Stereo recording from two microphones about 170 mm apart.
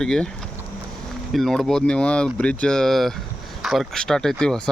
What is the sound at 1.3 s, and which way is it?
Speech, centre (ahead or behind).